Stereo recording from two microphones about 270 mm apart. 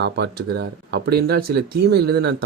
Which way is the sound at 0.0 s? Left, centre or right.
Right.